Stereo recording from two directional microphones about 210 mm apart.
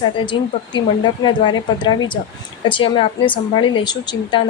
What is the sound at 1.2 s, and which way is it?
A woman's voice, 20° left (ahead or behind).